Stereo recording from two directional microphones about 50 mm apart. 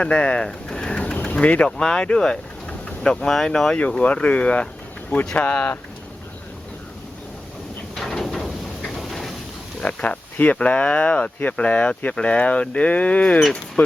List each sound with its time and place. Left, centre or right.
0.0 s speech: left
0.4 s a sound: centre
1.8 s speech: centre
4.0 s speech: left
7.9 s a sound: centre
9.8 s speech: left